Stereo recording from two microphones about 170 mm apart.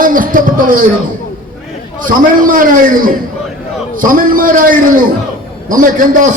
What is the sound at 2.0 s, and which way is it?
A man's voice, 55° right (ahead or behind).